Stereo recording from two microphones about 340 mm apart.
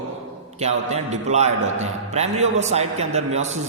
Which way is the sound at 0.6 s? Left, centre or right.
Centre.